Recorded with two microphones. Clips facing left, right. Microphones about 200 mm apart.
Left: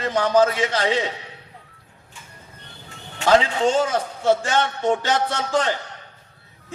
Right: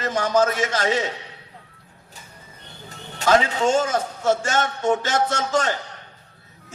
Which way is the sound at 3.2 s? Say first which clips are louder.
Left 1 dB; 45° right (ahead or behind).